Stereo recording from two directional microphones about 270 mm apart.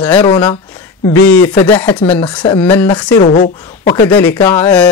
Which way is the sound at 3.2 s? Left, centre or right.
Left.